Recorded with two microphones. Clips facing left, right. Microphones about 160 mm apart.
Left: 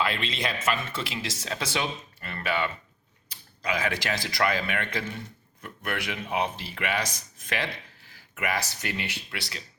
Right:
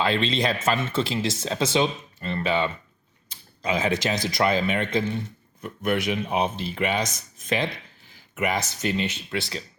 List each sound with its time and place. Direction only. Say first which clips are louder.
0.0 s speech: right 6 dB; 25° right (ahead or behind)